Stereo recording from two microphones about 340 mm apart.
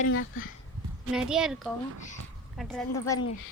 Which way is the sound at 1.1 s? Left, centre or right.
Centre.